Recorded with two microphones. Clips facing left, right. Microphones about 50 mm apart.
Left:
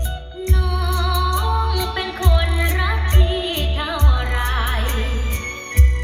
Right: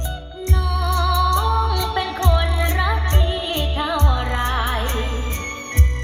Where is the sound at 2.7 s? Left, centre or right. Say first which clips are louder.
Right 1 dB; centre.